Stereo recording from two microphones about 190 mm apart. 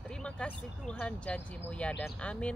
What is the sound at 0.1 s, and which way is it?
Speech, 5° left (ahead or behind).